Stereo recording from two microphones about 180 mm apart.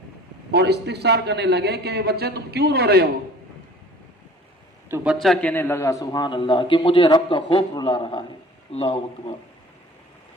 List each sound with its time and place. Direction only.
0.5 s a man's voice: 65° right (ahead or behind)
5.2 s a man's voice: 5° left (ahead or behind); by 9.3 s 30° left (ahead or behind)